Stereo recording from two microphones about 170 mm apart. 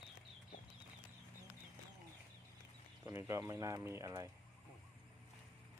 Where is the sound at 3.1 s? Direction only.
15° right (ahead or behind).